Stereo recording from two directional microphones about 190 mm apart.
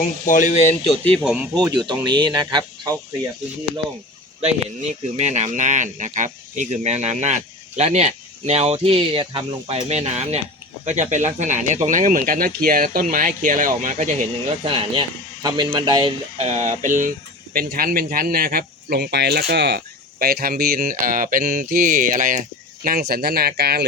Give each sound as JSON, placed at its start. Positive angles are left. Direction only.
{"t": 0.3, "sound": "speech", "side_deg": 40}
{"t": 1.0, "sound": "speech", "side_deg": 0}
{"t": 1.5, "sound": "speech", "side_deg": -20}
{"t": 5.1, "sound": "speech", "side_deg": -35}
{"t": 14.6, "sound": "speech", "side_deg": -30}
{"t": 16.4, "sound": "speech", "side_deg": -40}